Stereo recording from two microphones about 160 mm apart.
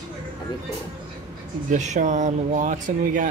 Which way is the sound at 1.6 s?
50° right (ahead or behind).